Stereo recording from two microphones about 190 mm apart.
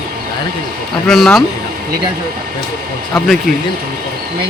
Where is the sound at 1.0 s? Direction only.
Centre (ahead or behind).